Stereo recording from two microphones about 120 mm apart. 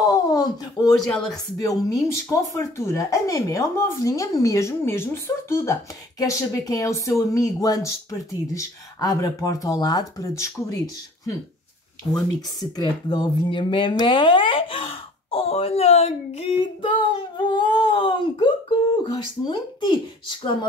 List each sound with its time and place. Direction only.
0.0 s a sound: 30° left (ahead or behind)
1.0 s speech: 5° left (ahead or behind)
1.6 s speech: 30° left (ahead or behind)
12.1 s speech: 35° left (ahead or behind); by 16.9 s 55° left (ahead or behind)
17.4 s speech: 40° left (ahead or behind)